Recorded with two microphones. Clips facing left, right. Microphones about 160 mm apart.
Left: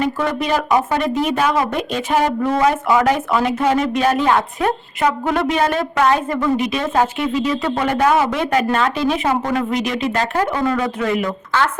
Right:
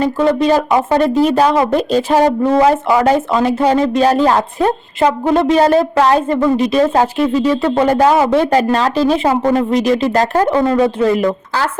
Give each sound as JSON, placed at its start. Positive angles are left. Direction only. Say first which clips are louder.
{"t": 0.0, "sound": "speech", "louder": "right 7 dB", "side_deg": -30}